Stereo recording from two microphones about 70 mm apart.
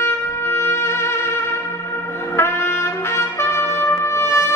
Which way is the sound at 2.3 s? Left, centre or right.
Left.